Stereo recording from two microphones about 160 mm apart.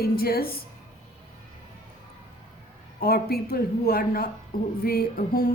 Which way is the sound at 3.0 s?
70° left (ahead or behind).